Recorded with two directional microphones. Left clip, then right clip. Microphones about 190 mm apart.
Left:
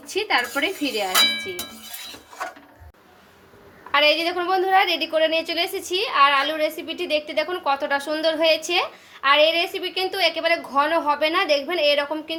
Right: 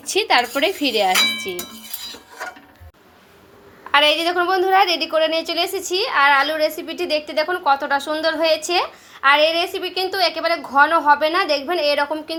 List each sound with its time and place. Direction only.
0.0 s speech: 45° right (ahead or behind)
1.2 s a woman's voice: 20° right (ahead or behind)
3.9 s a woman's voice: 25° right (ahead or behind)